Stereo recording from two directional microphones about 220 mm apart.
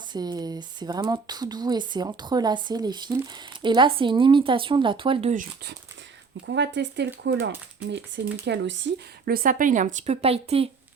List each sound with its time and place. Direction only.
0.1 s speech: 20° right (ahead or behind)
5.3 s speech: 35° right (ahead or behind)
6.4 s speech: 55° right (ahead or behind); by 10.7 s 25° right (ahead or behind)